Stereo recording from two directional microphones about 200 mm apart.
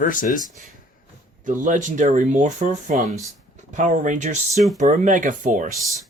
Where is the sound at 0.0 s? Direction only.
40° left (ahead or behind).